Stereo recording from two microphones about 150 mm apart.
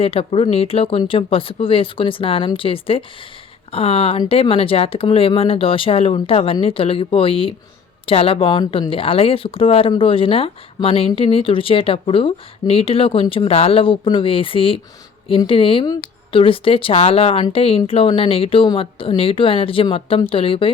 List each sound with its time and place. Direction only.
0.0 s speech: 40° left (ahead or behind)